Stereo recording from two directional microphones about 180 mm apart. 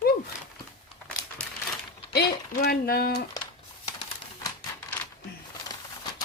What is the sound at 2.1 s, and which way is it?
Speech, 60° left (ahead or behind).